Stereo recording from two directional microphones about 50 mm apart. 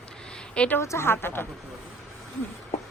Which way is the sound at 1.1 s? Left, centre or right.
Left.